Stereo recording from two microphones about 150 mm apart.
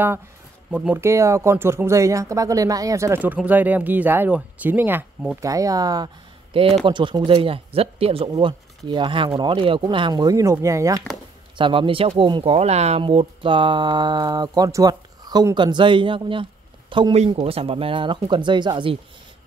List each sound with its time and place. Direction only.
0.7 s speech: 10° right (ahead or behind)
11.5 s speech: 35° right (ahead or behind)